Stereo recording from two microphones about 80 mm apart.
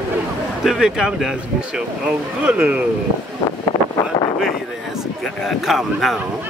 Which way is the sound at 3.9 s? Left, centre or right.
Left.